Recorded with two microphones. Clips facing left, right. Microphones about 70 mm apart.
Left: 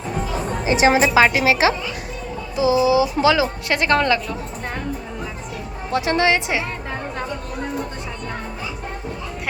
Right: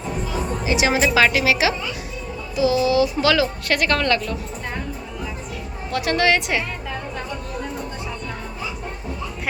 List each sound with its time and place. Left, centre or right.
0.6 s speech: left
2.6 s speech: centre
5.9 s speech: left